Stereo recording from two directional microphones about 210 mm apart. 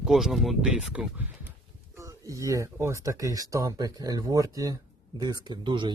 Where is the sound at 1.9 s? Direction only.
15° right (ahead or behind).